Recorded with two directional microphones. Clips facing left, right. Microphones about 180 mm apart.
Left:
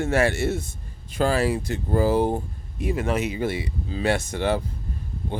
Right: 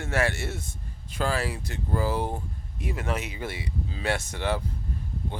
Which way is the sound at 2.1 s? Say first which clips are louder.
Left 8 dB; 20° left (ahead or behind).